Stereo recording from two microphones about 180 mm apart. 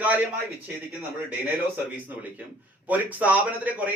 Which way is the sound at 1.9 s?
10° right (ahead or behind).